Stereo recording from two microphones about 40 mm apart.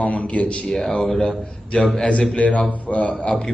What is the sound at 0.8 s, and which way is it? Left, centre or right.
A man's voice, centre.